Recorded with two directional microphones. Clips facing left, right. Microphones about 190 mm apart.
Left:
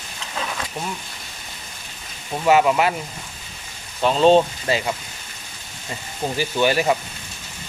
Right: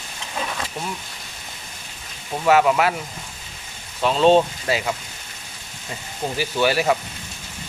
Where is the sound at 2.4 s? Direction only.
Centre (ahead or behind).